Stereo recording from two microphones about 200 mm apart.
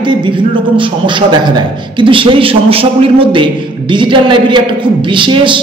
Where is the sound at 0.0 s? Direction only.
25° right (ahead or behind).